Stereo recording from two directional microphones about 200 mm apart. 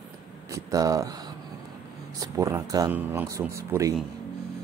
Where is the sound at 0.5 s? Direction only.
15° right (ahead or behind).